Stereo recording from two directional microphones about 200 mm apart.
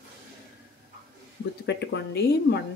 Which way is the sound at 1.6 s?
60° left (ahead or behind).